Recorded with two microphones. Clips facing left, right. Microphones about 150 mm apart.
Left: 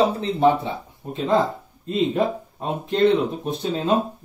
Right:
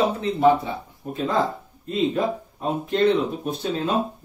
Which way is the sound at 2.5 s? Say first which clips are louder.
Even; 25° left (ahead or behind).